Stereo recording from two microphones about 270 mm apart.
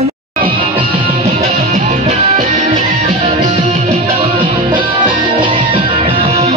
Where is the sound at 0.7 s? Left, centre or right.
Right.